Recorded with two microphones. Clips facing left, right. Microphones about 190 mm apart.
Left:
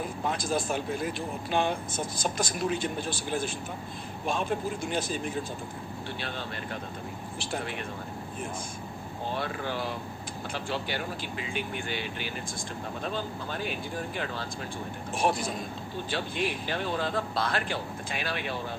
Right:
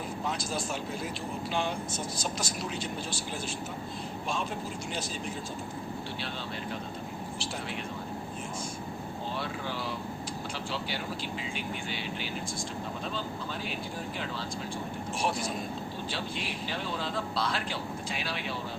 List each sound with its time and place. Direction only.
0.3 s speech: 55° left (ahead or behind)
9.3 s speech: 55° left (ahead or behind)
15.2 s speech: 55° left (ahead or behind)